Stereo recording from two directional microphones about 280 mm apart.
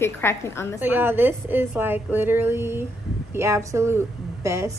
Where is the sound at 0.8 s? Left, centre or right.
Centre.